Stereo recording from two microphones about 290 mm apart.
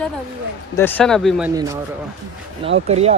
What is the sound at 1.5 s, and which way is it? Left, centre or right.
Speech, centre.